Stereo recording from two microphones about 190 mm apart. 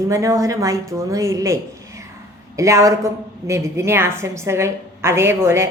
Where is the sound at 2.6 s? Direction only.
15° right (ahead or behind).